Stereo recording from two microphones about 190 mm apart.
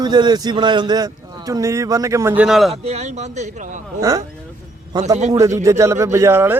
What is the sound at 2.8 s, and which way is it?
Speech, 35° right (ahead or behind).